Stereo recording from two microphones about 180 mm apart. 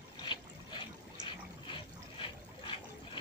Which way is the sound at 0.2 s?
25° left (ahead or behind).